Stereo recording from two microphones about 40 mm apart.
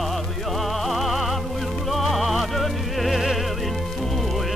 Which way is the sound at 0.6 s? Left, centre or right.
Centre.